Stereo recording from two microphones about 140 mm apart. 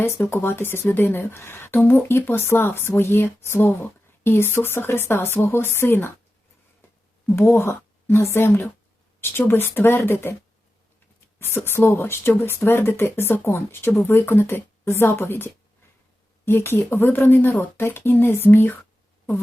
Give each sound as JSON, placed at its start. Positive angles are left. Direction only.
{"t": 0.0, "sound": "a woman's voice", "side_deg": 15}
{"t": 7.3, "sound": "speech", "side_deg": 15}
{"t": 11.3, "sound": "speech", "side_deg": 15}
{"t": 16.5, "sound": "speech", "side_deg": 15}